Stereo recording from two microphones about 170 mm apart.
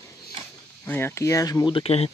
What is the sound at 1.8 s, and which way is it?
Speech, 35° left (ahead or behind).